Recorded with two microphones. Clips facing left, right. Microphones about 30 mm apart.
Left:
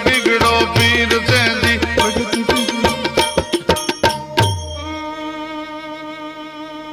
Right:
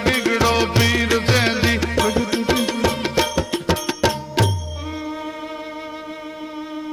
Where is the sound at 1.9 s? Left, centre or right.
Left.